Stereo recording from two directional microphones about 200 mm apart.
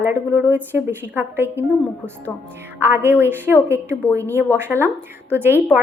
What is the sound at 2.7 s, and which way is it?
Speech, 10° right (ahead or behind).